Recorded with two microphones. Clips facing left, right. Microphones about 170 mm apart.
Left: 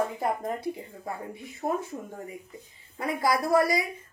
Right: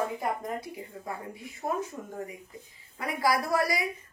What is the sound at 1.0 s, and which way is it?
Speech, 25° left (ahead or behind).